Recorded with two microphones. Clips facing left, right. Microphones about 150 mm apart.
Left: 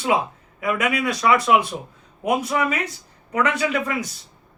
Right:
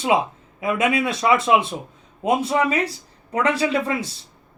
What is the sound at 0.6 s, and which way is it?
Speech, 25° right (ahead or behind).